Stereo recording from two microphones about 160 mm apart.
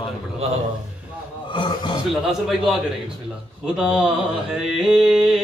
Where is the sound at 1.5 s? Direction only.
30° left (ahead or behind).